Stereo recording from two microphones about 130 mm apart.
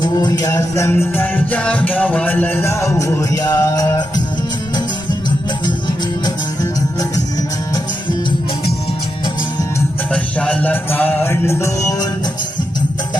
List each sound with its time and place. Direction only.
0.0 s music: 30° left (ahead or behind)
6.2 s music: 30° left (ahead or behind)
10.1 s music: 10° left (ahead or behind)